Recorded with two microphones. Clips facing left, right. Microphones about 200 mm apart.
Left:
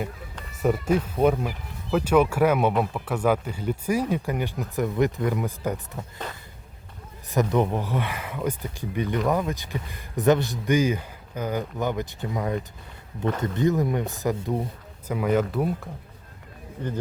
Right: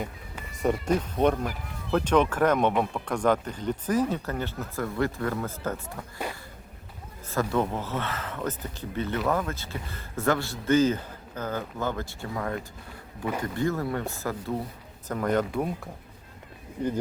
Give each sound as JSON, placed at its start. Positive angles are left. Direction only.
{"t": 0.6, "sound": "speech", "side_deg": 5}
{"t": 7.3, "sound": "speech", "side_deg": 20}
{"t": 15.0, "sound": "speech", "side_deg": 10}